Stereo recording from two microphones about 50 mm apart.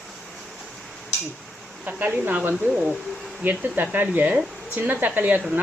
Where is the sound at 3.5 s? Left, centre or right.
Right.